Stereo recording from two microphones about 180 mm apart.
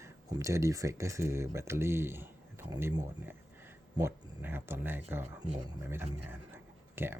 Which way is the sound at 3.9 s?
15° right (ahead or behind).